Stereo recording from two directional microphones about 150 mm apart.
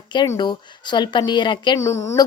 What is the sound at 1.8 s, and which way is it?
Speech, 20° left (ahead or behind).